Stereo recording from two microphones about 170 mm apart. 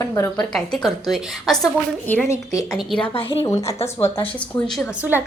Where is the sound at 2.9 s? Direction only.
35° left (ahead or behind).